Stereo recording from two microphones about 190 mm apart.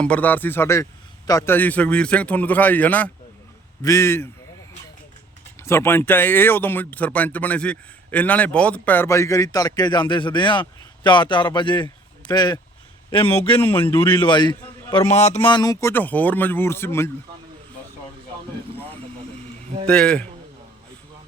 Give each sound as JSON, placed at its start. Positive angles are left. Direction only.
{"t": 0.0, "sound": "speech", "side_deg": 5}
{"t": 5.6, "sound": "speech", "side_deg": 15}
{"t": 13.5, "sound": "speech", "side_deg": 10}
{"t": 14.3, "sound": "a man's voice", "side_deg": 25}
{"t": 19.9, "sound": "speech", "side_deg": 5}